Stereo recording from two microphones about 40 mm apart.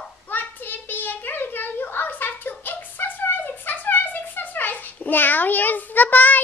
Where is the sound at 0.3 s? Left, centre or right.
Left.